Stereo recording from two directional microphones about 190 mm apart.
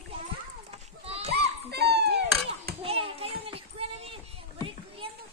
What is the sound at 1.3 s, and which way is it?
Children playing, 60° right (ahead or behind).